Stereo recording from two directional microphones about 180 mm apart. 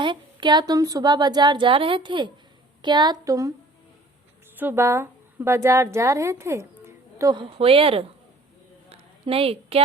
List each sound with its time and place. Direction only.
0.0 s speech: 25° right (ahead or behind)
4.5 s a woman's voice: 10° right (ahead or behind)
7.6 s speech: 30° right (ahead or behind)
8.9 s a sound: 30° right (ahead or behind)